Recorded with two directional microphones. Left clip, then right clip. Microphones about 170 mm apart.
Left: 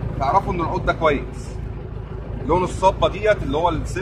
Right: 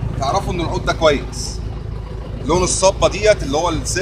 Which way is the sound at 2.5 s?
50° right (ahead or behind).